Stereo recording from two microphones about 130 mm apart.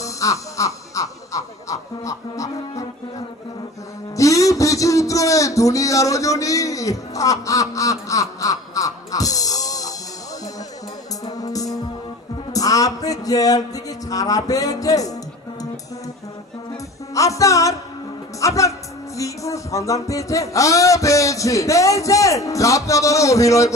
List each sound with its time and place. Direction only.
0.0 s music: 25° left (ahead or behind)
4.2 s a sound: 25° left (ahead or behind)
11.3 s music: 30° left (ahead or behind)
12.5 s speech: 25° left (ahead or behind)
17.2 s music: 25° left (ahead or behind)
18.3 s speech: 25° left (ahead or behind)
19.1 s music: 25° left (ahead or behind)